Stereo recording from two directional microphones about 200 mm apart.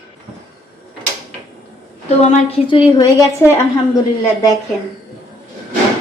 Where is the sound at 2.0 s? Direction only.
35° left (ahead or behind).